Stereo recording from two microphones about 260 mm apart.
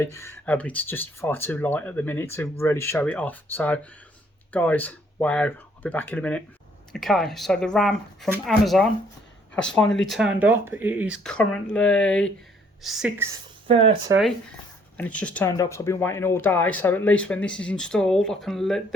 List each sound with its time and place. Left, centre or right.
0.0 s speech: centre
13.7 s speech: right
14.9 s speech: centre